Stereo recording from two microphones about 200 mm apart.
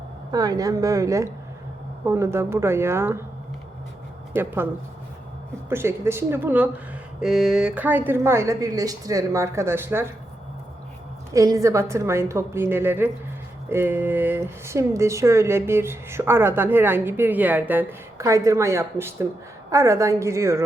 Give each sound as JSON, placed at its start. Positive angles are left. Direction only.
{"t": 0.3, "sound": "speech", "side_deg": -20}
{"t": 4.4, "sound": "speech", "side_deg": -10}
{"t": 11.3, "sound": "speech", "side_deg": -15}